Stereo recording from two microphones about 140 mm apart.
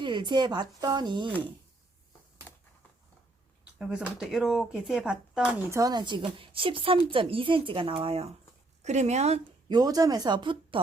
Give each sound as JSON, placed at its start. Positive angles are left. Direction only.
{"t": 0.0, "sound": "speech", "side_deg": -35}
{"t": 3.8, "sound": "speech", "side_deg": -5}
{"t": 5.7, "sound": "speech", "side_deg": -30}
{"t": 8.8, "sound": "speech", "side_deg": -55}
{"t": 9.6, "sound": "speech", "side_deg": -30}